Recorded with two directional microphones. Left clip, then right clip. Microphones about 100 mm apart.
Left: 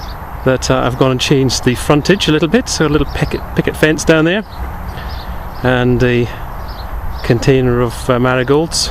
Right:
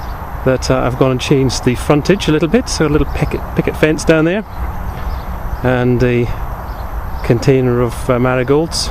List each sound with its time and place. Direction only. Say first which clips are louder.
0.4 s speech: left 1 dB; 15° left (ahead or behind)
5.6 s speech: left 1 dB; 20° left (ahead or behind)
7.3 s speech: even; 15° left (ahead or behind)